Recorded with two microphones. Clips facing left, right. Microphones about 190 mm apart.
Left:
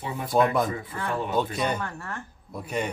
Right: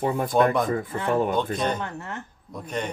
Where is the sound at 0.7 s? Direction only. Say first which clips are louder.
Right 6 dB; 50° right (ahead or behind).